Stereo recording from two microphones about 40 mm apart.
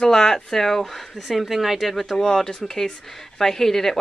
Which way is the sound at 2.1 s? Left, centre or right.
Centre.